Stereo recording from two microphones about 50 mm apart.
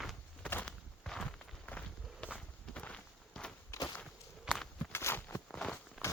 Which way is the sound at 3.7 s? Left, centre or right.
Left.